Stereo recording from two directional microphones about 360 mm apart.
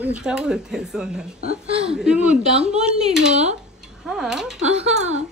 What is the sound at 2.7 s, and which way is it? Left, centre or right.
Speech, centre.